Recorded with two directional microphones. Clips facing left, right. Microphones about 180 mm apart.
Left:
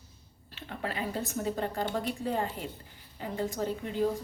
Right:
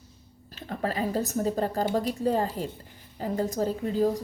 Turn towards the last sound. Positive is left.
turn(degrees=-40)  # may be behind; listen again after turning